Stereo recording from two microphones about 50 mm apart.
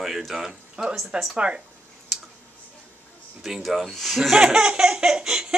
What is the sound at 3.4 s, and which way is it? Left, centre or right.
Speech, centre.